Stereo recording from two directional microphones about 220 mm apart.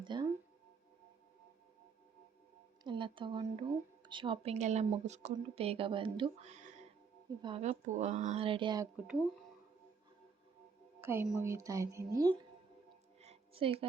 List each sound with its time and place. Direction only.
0.0 s music: 20° right (ahead or behind)
2.8 s speech: 20° right (ahead or behind)
11.0 s speech: 10° right (ahead or behind)
13.2 s music: 25° right (ahead or behind)